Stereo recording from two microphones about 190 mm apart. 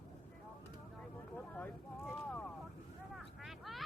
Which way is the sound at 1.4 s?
10° left (ahead or behind).